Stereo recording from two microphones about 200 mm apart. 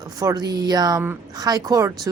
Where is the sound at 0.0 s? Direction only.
20° right (ahead or behind).